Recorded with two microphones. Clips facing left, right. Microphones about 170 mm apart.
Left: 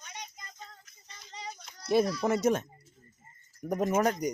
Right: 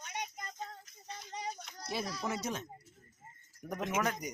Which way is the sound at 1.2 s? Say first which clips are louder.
Right 1 dB; 55° right (ahead or behind).